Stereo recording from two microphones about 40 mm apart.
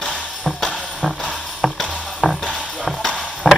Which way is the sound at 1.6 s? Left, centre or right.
Centre.